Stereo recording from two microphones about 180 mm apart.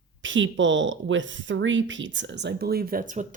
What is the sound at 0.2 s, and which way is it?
Speech, 90° right.